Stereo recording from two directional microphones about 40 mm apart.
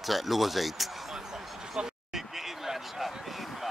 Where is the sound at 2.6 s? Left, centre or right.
Centre.